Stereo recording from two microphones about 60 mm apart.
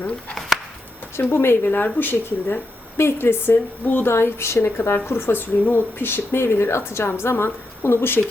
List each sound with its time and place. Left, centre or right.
1.1 s a woman's voice: left